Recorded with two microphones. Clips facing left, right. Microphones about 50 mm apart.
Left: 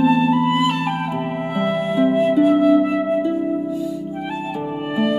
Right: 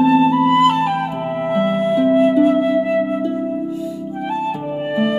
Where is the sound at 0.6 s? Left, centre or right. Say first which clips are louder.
Right 6 dB; right.